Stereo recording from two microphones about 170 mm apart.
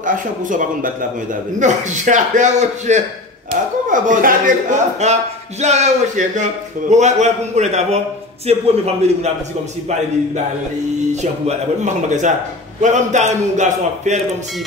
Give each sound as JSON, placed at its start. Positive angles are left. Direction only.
{"t": 0.0, "sound": "a man's voice", "side_deg": -50}
{"t": 11.4, "sound": "a man's voice", "side_deg": -45}